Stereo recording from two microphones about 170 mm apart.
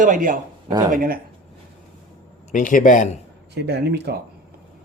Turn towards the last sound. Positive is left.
turn(degrees=-75)  # may be behind; listen again after turning